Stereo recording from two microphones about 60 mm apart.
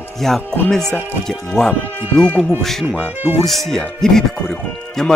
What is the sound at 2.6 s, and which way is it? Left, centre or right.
Speech, centre.